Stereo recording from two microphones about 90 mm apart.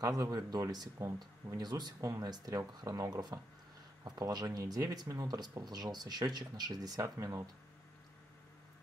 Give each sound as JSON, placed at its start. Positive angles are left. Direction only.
{"t": 0.0, "sound": "speech", "side_deg": -45}
{"t": 2.0, "sound": "speech", "side_deg": -35}